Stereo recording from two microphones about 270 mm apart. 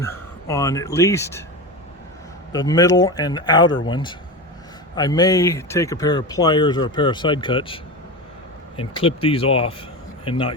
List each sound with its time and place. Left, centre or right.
0.0 s speech: centre
2.5 s speech: centre